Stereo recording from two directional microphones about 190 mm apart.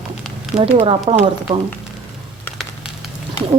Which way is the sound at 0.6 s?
30° right (ahead or behind).